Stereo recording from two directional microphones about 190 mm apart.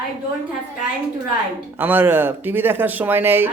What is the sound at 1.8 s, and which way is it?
Speech, 10° right (ahead or behind).